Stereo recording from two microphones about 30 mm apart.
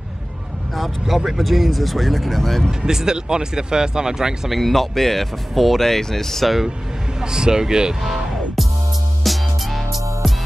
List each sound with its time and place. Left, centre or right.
0.7 s speech: centre
2.8 s speech: right
4.6 s speech: centre
5.8 s speech: centre
7.2 s speech: right
8.0 s music: centre